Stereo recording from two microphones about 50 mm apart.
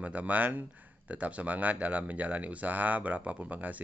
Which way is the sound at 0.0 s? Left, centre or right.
Right.